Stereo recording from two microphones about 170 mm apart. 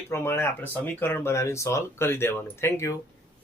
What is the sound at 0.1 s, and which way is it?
Speech, 15° left (ahead or behind).